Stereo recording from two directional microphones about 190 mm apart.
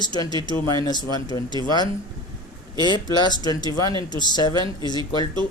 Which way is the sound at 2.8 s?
20° left (ahead or behind).